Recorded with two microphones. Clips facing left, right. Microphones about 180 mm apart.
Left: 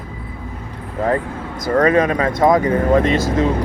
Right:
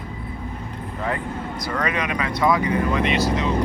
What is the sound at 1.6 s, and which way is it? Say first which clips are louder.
Speech: left 12 dB; 45° left (ahead or behind).